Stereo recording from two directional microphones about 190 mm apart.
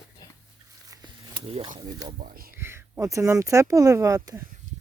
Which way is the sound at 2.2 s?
50° right (ahead or behind).